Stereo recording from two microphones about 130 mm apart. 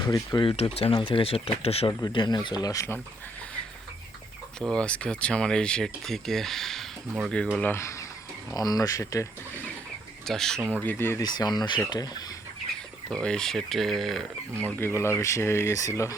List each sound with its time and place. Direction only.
0.1 s speech: 25° left (ahead or behind)
0.4 s speech: 50° left (ahead or behind)
1.9 s speech: 30° left (ahead or behind)
4.8 s speech: 10° left (ahead or behind)
7.5 s speech: 15° left (ahead or behind)
8.5 s speech: 30° left (ahead or behind)
10.2 s speech: 5° left (ahead or behind)
10.6 s speech: 15° right (ahead or behind)
10.8 s speech: 15° left (ahead or behind)
11.2 s speech: 30° left (ahead or behind)
13.1 s speech: 5° left (ahead or behind)
14.8 s speech: 20° left (ahead or behind)